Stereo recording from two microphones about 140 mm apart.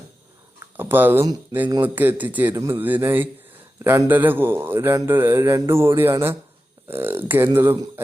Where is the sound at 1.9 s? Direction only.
15° right (ahead or behind).